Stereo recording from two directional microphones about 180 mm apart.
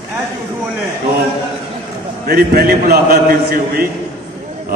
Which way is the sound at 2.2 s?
60° right (ahead or behind).